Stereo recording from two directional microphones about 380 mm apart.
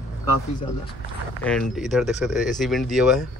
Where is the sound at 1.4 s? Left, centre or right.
Centre.